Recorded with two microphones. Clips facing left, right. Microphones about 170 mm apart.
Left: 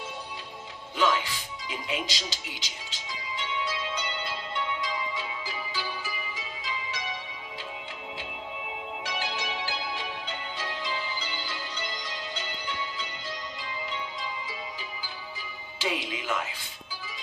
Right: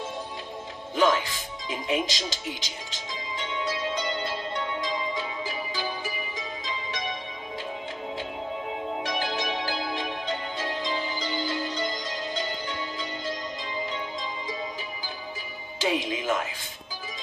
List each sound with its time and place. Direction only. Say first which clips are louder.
0.9 s music: right 4 dB; 45° right (ahead or behind)
9.0 s change ringing: right 3 dB; 45° right (ahead or behind)
15.8 s music: right 5 dB; 45° right (ahead or behind)